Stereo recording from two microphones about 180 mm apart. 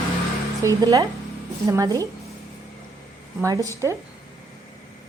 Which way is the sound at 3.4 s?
20° right (ahead or behind).